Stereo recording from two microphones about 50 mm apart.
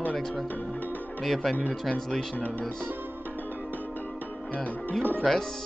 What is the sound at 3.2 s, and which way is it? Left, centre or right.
Music, left.